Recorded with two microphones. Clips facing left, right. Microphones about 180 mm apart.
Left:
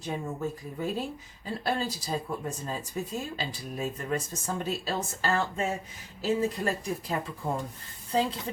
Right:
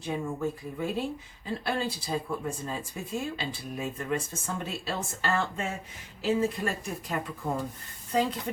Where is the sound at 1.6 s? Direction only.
40° left (ahead or behind).